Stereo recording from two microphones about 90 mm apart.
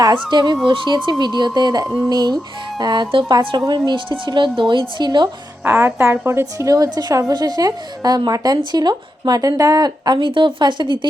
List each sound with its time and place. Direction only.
0.0 s a woman's voice: 55° right (ahead or behind)
5.6 s a woman's voice: 30° right (ahead or behind)
6.4 s a woman's voice: 40° right (ahead or behind); by 11.1 s 60° right (ahead or behind)